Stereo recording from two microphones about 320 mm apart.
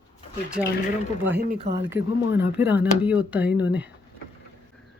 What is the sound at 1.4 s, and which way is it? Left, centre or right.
Speech, right.